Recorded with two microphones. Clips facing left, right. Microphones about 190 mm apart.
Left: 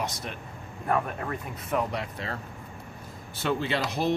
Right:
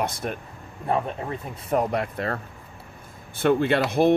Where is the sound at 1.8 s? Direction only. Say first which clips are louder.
Right 7 dB; 55° right (ahead or behind).